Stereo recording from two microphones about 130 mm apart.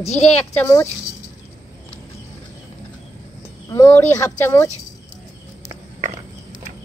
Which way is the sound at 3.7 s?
20° left (ahead or behind).